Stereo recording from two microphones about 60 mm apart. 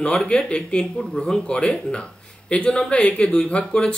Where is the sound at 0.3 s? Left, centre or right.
Centre.